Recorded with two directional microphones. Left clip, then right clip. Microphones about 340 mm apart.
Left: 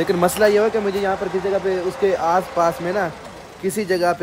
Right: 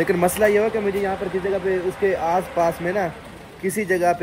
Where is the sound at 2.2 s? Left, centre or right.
Centre.